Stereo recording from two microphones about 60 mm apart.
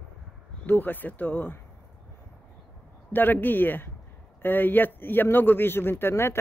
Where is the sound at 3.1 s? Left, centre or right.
Left.